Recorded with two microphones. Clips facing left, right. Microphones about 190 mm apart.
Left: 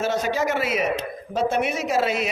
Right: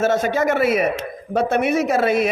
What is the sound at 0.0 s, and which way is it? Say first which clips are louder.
A man's voice: right 5 dB; 50° right (ahead or behind).